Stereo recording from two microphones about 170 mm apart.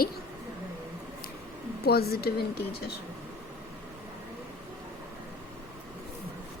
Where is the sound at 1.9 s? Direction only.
65° left (ahead or behind).